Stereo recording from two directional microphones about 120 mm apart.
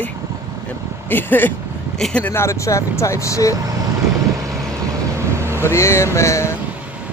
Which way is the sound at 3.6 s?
30° right (ahead or behind).